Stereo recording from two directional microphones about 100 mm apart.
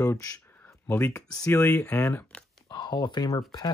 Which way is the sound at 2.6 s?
45° left (ahead or behind).